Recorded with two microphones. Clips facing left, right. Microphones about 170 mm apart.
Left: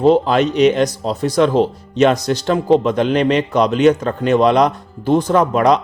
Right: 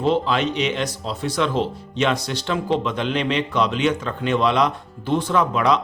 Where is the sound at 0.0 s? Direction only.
45° left (ahead or behind).